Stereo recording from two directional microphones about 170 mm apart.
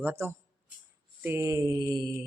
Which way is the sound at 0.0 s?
15° right (ahead or behind).